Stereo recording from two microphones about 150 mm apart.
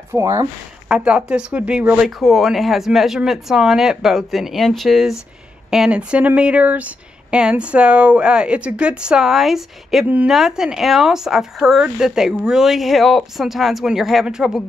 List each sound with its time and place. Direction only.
0.1 s speech: 20° right (ahead or behind)
0.8 s speech: 5° right (ahead or behind)